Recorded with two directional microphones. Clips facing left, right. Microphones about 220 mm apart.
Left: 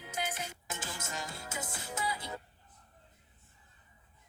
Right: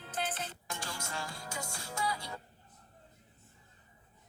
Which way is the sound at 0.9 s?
20° left (ahead or behind).